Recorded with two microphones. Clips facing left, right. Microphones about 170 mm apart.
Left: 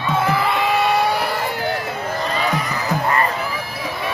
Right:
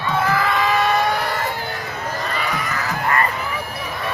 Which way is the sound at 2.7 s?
15° left (ahead or behind).